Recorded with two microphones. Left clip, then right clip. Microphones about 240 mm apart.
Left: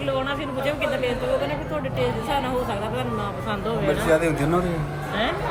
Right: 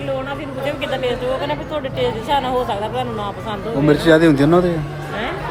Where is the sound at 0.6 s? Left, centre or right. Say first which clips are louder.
Right 3 dB; centre.